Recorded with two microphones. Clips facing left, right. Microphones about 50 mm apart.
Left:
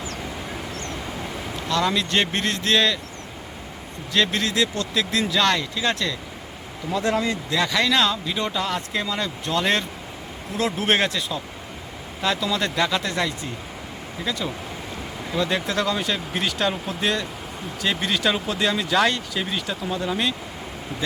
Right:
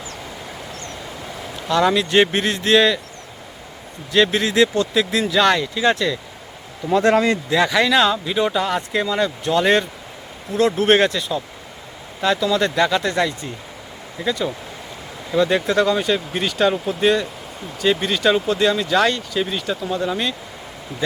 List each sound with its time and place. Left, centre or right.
1.7 s speech: centre
4.1 s speech: centre
4.5 s speech: right
5.2 s speech: centre
6.9 s speech: right
7.7 s speech: centre